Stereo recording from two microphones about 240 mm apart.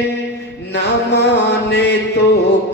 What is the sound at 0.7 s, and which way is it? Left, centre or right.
Mantra, left.